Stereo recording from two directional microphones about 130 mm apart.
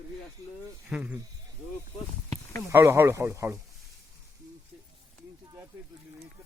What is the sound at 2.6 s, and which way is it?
Speech, 20° right (ahead or behind).